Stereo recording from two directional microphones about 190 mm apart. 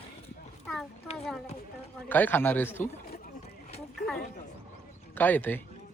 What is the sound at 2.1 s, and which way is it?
Speech, 10° left (ahead or behind).